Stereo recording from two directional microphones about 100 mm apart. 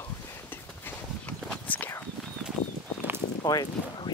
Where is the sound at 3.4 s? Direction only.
40° left (ahead or behind).